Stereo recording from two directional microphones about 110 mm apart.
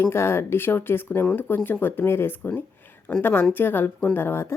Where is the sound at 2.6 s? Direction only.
20° left (ahead or behind).